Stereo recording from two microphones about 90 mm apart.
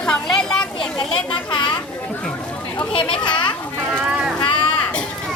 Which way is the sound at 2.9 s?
70° left (ahead or behind).